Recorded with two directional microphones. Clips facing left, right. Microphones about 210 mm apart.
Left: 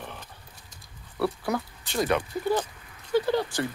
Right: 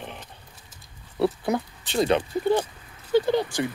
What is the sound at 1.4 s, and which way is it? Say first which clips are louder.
Speech: right 3 dB; 25° right (ahead or behind).